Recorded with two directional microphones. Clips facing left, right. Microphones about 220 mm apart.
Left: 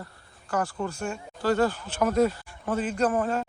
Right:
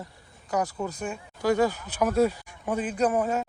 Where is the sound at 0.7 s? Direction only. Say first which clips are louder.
Left 1 dB; 5° right (ahead or behind).